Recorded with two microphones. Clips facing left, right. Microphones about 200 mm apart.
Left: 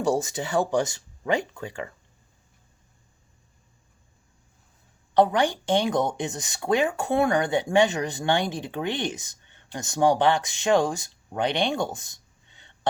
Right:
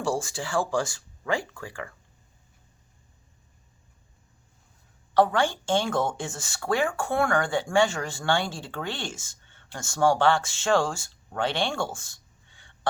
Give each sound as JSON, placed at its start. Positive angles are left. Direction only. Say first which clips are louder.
{"t": 0.0, "sound": "speech", "louder": "left 4 dB", "side_deg": 20}
{"t": 5.1, "sound": "speech", "louder": "left 2 dB", "side_deg": 20}